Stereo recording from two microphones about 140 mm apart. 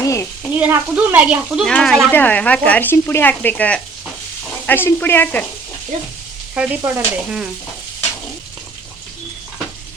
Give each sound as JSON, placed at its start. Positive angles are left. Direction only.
{"t": 0.0, "sound": "stir", "side_deg": 20}
{"t": 0.6, "sound": "speech", "side_deg": -10}
{"t": 6.5, "sound": "speech", "side_deg": -10}